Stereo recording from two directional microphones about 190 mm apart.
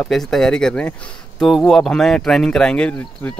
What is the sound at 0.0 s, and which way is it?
Speech, centre (ahead or behind).